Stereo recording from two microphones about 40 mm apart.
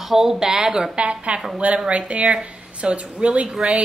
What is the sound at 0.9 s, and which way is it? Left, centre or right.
A woman's voice, right.